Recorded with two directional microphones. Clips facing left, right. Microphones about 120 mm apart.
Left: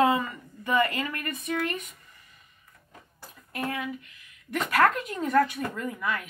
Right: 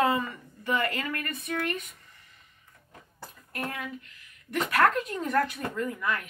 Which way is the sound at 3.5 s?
10° left (ahead or behind).